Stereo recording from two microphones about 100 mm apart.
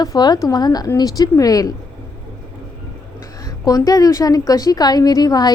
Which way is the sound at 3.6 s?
35° left (ahead or behind).